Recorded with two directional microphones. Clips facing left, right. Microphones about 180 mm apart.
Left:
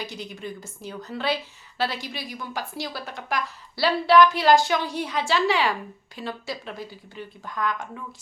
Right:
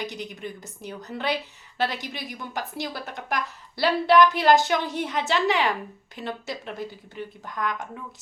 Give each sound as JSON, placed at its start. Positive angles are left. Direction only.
{"t": 0.0, "sound": "a woman's voice", "side_deg": -20}